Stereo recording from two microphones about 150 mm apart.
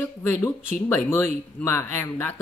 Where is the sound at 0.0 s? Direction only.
20° left (ahead or behind).